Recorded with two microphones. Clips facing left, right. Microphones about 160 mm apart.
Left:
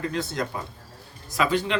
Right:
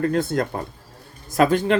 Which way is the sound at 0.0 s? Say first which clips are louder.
Right 7 dB; 50° right (ahead or behind).